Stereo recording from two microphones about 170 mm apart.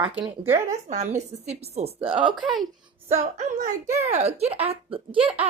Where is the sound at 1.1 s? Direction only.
40° right (ahead or behind).